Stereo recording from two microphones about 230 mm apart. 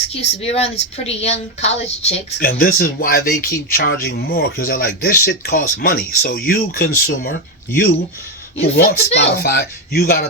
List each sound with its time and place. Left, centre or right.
0.1 s speech: left
2.5 s speech: left
8.7 s speech: left